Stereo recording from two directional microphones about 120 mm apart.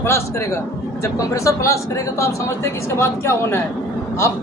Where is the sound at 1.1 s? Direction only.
25° left (ahead or behind).